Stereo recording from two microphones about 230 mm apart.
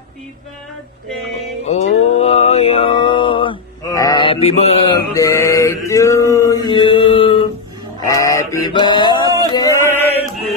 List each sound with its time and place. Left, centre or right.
1.7 s mantra: left
5.1 s mantra: centre
8.0 s male singing: centre
9.5 s chant: centre